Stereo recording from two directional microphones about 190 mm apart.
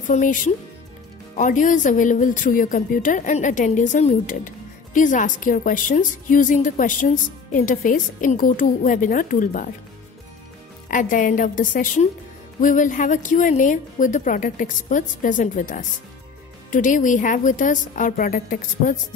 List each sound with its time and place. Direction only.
0.1 s speech: 40° left (ahead or behind)
10.9 s speech: 45° left (ahead or behind)